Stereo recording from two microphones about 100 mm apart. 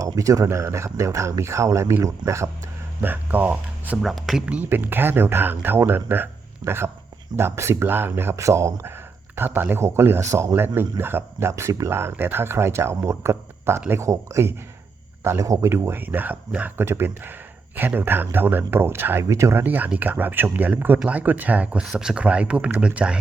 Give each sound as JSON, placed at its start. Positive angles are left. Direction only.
{"t": 0.0, "sound": "a man's voice", "side_deg": -35}
{"t": 4.0, "sound": "speech", "side_deg": 0}
{"t": 4.4, "sound": "a man's voice", "side_deg": -15}